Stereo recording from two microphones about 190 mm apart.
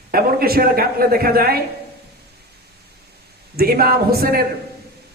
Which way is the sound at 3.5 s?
55° right (ahead or behind).